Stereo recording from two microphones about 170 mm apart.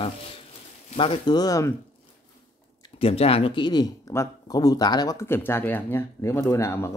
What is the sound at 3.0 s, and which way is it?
Speech, 35° left (ahead or behind).